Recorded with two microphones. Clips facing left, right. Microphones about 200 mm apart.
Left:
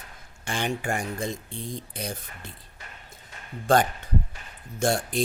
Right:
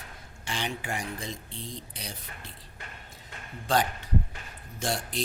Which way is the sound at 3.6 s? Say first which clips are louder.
Left 5 dB; 50° left (ahead or behind).